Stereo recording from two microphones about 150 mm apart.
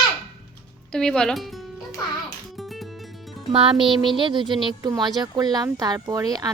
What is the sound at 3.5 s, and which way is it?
A woman's voice, 35° right (ahead or behind).